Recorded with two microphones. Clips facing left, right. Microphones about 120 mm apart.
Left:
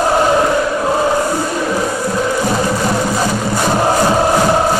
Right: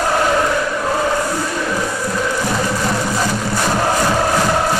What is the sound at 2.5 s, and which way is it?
Music, 20° left (ahead or behind).